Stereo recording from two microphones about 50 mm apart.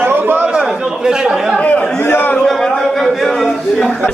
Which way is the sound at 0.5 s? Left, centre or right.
Centre.